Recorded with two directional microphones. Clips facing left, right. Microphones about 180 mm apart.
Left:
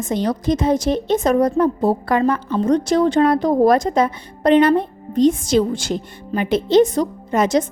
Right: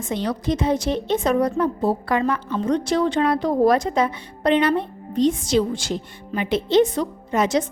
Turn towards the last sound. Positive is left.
turn(degrees=45)  # may be behind; listen again after turning